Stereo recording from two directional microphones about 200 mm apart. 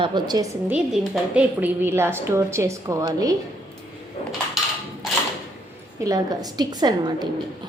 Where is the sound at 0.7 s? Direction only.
5° right (ahead or behind).